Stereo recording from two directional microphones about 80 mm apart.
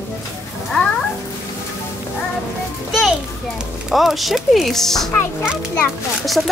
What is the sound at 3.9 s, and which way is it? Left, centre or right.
Speech, centre.